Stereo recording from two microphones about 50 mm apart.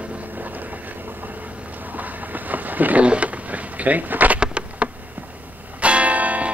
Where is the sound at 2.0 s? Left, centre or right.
Right.